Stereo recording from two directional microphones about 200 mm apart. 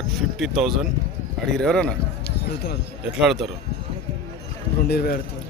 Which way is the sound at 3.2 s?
Centre (ahead or behind).